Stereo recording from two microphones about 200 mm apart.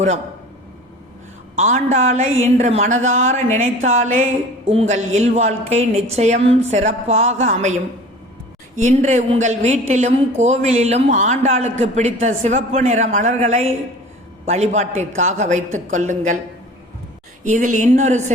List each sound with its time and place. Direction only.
1.5 s a woman's voice: 35° right (ahead or behind)
17.4 s a woman's voice: 40° right (ahead or behind)